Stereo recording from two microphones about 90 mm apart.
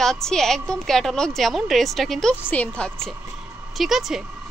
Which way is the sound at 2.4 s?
15° left (ahead or behind).